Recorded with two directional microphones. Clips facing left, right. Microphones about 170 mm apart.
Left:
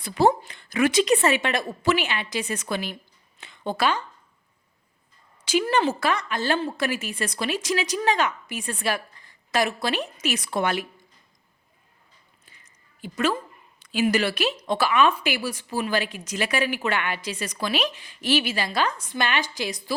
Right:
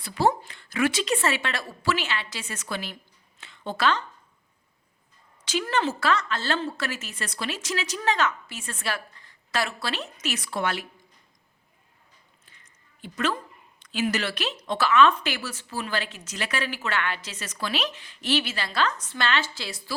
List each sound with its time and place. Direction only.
0.0 s a woman's voice: 20° left (ahead or behind)
5.5 s a woman's voice: 10° left (ahead or behind)
12.5 s a woman's voice: 10° left (ahead or behind)